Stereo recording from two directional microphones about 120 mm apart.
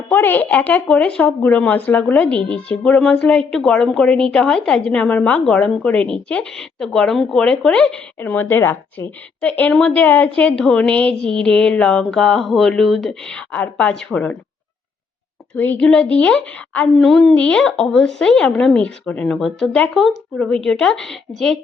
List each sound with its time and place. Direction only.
0.1 s speech: 15° left (ahead or behind)
15.5 s speech: 15° left (ahead or behind)